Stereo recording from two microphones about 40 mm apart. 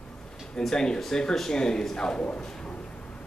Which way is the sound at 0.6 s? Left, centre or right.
Centre.